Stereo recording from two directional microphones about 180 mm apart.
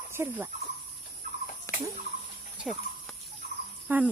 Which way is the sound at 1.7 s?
15° left (ahead or behind).